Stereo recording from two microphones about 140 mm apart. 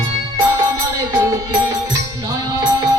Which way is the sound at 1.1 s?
25° right (ahead or behind).